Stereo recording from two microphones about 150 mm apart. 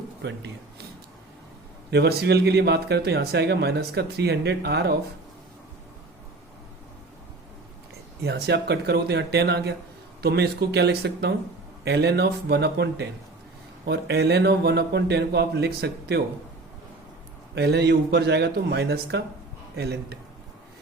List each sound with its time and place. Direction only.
2.0 s speech: 90° right
8.2 s speech: 90° right
13.9 s speech: 90° right
17.5 s speech: 90° right